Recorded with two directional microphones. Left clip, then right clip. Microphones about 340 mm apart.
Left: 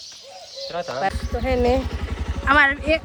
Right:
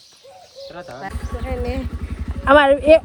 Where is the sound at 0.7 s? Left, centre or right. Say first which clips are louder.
Left 9 dB; centre.